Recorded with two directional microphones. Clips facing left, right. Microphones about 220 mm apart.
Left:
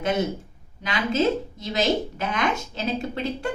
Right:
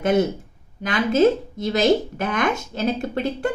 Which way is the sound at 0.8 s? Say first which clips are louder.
Right 6 dB; 50° right (ahead or behind).